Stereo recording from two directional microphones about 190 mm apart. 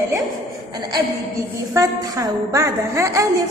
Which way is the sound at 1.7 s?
15° right (ahead or behind).